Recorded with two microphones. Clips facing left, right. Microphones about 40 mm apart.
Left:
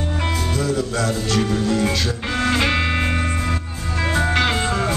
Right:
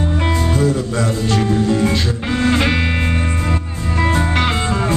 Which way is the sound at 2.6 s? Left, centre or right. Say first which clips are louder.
Right 2 dB; centre.